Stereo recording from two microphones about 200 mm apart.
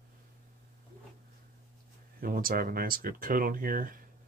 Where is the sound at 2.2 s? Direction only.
45° right (ahead or behind).